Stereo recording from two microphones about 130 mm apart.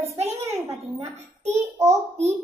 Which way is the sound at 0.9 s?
60° right (ahead or behind).